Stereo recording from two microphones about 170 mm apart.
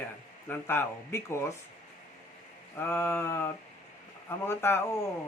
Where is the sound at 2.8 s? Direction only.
10° left (ahead or behind).